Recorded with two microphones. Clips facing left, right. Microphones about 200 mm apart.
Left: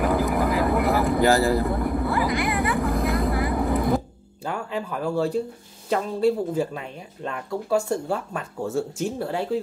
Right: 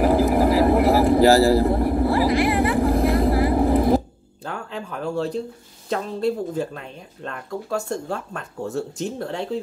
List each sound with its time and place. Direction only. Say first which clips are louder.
0.0 s vehicle: right 5 dB; 30° right (ahead or behind)
4.5 s speech: left 3 dB; 10° left (ahead or behind)
7.9 s speech: left 2 dB; 10° left (ahead or behind)